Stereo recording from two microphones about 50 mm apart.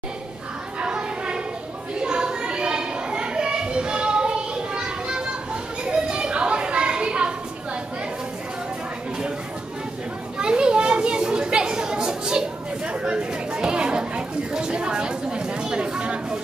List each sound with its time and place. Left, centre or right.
0.7 s a sound: centre
5.9 s children playing: centre
10.4 s children playing: centre